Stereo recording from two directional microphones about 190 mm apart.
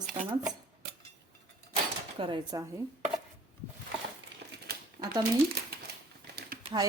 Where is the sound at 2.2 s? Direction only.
25° right (ahead or behind).